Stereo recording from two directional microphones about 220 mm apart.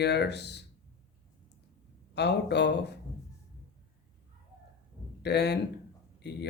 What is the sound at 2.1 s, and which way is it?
Speech, 50° left (ahead or behind).